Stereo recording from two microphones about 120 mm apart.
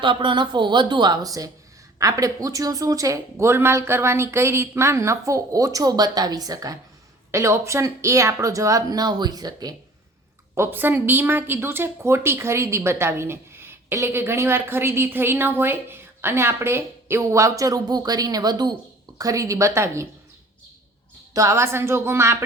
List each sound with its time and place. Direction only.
0.0 s a woman's voice: 45° right (ahead or behind)
10.5 s speech: 20° right (ahead or behind)
21.3 s speech: 25° right (ahead or behind)